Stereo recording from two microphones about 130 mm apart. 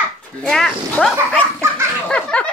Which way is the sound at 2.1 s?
10° left (ahead or behind).